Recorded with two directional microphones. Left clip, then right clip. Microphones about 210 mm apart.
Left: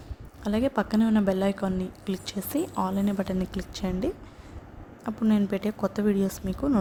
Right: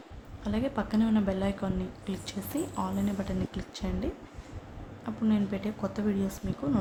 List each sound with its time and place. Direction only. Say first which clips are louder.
0.4 s a woman's voice: left 6 dB; 35° left (ahead or behind)